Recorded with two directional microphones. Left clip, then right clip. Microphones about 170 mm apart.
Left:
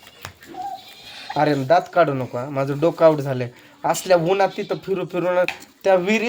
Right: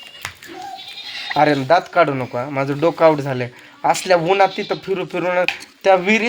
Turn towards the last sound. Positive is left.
turn(degrees=-15)  # may be behind; listen again after turning